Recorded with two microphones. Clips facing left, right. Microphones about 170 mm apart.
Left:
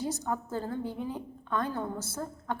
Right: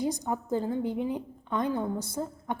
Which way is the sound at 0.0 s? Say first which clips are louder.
Right 3 dB; 15° right (ahead or behind).